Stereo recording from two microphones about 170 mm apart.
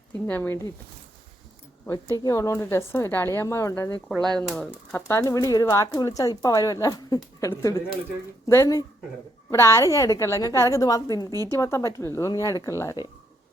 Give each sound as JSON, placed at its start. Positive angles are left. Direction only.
{"t": 0.3, "sound": "a woman's voice", "side_deg": 10}
{"t": 2.1, "sound": "a woman's voice", "side_deg": 20}
{"t": 4.1, "sound": "speech", "side_deg": 0}
{"t": 4.9, "sound": "a woman's voice", "side_deg": 15}